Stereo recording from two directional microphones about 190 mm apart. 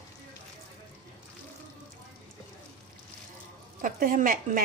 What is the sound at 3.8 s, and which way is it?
Speech, 45° right (ahead or behind).